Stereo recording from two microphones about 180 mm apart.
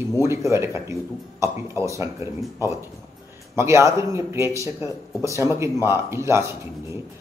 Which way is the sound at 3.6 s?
15° right (ahead or behind).